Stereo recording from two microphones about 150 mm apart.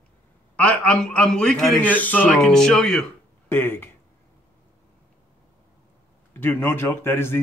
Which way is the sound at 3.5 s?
15° left (ahead or behind).